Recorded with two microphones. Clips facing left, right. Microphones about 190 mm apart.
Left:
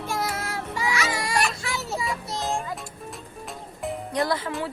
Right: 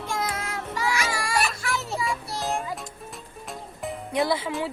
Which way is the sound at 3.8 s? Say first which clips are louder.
Right 1 dB; 5° right (ahead or behind).